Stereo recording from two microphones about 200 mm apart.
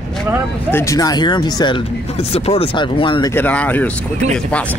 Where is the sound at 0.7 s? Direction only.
15° left (ahead or behind).